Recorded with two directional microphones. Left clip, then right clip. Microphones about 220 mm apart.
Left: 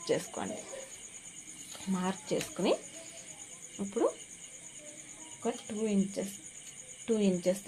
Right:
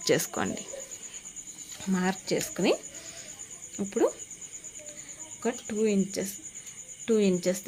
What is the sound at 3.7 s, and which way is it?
Speech, 40° right (ahead or behind).